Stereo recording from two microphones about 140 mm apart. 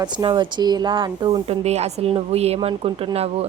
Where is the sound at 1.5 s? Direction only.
50° right (ahead or behind).